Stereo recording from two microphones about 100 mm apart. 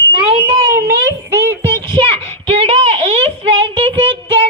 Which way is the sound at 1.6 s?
25° left (ahead or behind).